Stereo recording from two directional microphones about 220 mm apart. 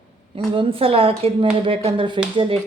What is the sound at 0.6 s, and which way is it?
A woman's voice, 25° right (ahead or behind).